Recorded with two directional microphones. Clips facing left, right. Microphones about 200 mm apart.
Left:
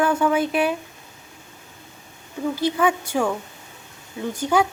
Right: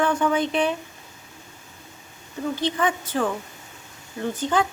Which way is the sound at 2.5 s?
10° left (ahead or behind).